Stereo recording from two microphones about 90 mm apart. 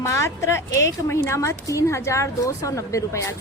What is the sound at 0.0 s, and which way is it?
A woman's voice, 35° left (ahead or behind).